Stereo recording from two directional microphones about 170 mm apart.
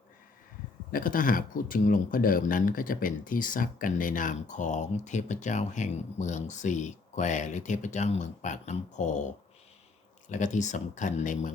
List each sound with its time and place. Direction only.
0.9 s speech: 55° left (ahead or behind)